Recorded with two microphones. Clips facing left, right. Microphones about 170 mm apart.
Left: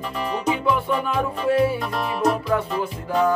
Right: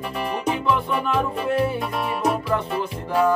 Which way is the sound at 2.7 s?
10° right (ahead or behind).